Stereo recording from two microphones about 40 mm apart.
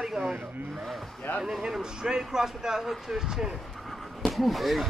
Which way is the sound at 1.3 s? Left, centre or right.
Left.